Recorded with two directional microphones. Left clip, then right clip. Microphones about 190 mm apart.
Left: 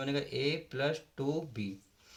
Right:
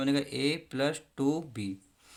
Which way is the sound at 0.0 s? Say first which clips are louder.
Right 4 dB; 45° right (ahead or behind).